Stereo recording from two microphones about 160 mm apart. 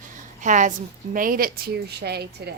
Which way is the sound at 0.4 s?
50° right (ahead or behind).